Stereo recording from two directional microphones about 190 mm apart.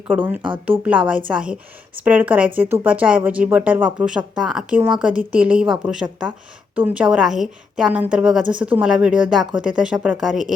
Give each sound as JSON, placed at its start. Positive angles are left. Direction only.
{"t": 0.1, "sound": "speech", "side_deg": -10}
{"t": 0.4, "sound": "speech", "side_deg": -25}
{"t": 1.3, "sound": "a woman's voice", "side_deg": -5}